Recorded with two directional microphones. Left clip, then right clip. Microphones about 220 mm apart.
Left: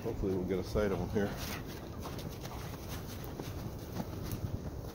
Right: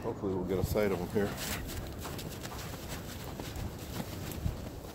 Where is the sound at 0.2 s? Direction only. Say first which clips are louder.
Left 1 dB; centre (ahead or behind).